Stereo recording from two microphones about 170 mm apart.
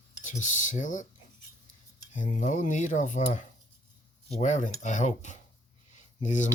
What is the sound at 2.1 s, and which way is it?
Speech, 50° left (ahead or behind).